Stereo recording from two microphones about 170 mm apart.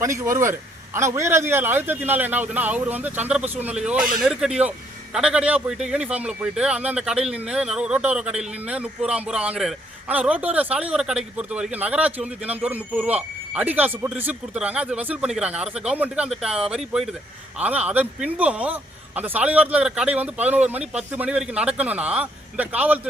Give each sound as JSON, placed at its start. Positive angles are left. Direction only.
{"t": 0.0, "sound": "speech", "side_deg": -15}